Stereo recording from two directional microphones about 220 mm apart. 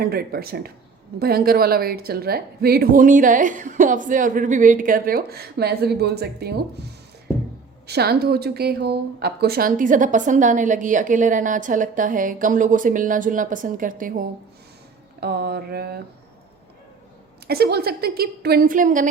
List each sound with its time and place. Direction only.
0.0 s a woman's voice: 45° right (ahead or behind)
15.2 s speech: 45° right (ahead or behind)
17.5 s speech: 45° right (ahead or behind)